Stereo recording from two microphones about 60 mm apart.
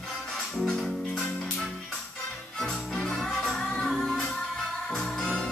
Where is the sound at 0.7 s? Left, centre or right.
Centre.